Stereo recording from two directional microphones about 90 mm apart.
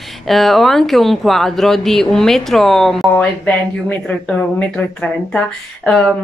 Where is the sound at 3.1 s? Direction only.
15° left (ahead or behind).